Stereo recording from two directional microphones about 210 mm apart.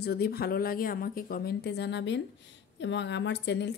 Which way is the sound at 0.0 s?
50° left (ahead or behind).